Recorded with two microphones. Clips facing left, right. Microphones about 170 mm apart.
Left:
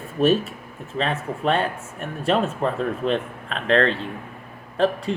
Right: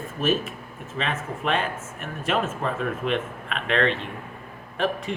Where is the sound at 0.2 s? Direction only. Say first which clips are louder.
Left 6 dB; 35° left (ahead or behind).